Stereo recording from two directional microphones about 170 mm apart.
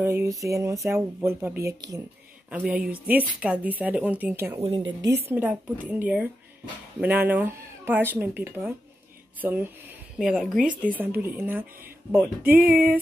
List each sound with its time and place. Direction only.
0.0 s speech: 15° right (ahead or behind)
2.5 s a woman's voice: 5° right (ahead or behind)
12.6 s speech: 10° right (ahead or behind)